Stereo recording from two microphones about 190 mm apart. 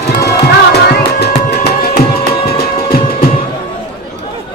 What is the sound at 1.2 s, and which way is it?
Music, 60° left (ahead or behind).